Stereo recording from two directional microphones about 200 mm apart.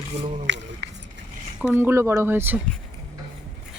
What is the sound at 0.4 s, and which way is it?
Speech, 65° right (ahead or behind).